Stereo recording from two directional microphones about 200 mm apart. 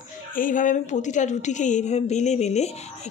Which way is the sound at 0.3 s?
40° left (ahead or behind).